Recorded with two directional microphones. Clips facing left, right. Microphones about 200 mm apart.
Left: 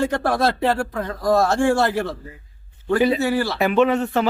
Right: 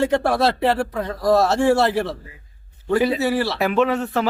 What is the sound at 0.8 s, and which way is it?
Speech, 5° right (ahead or behind).